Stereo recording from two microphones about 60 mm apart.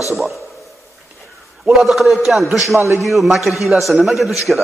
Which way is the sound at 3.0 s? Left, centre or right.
Centre.